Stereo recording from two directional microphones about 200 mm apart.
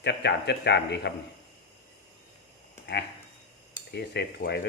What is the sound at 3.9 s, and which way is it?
Speech, 55° left (ahead or behind).